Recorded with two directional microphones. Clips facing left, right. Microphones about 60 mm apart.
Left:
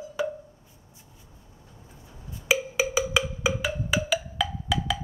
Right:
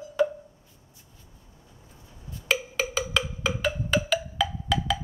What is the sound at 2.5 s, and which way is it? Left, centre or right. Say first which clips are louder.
Percussion: left 2 dB; centre.